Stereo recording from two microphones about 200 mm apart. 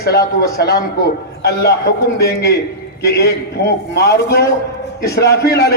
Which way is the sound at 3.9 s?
55° left (ahead or behind).